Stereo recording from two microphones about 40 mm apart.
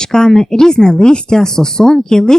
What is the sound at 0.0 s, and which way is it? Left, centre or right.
Speech, centre.